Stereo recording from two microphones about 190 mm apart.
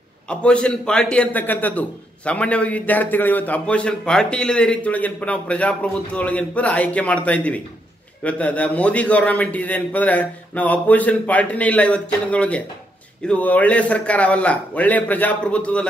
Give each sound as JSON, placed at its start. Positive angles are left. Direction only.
{"t": 0.3, "sound": "a man's voice", "side_deg": 5}